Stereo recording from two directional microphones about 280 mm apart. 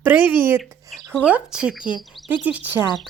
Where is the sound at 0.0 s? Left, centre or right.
Centre.